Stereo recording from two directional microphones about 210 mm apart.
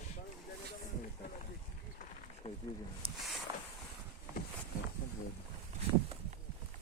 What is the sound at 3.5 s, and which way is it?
Boat, 20° right (ahead or behind).